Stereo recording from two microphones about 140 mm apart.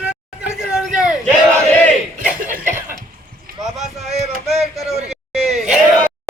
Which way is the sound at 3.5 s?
90° right.